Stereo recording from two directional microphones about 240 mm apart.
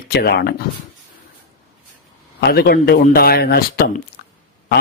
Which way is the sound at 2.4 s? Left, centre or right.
Left.